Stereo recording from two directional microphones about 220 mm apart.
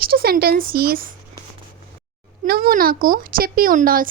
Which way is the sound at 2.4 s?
40° right (ahead or behind).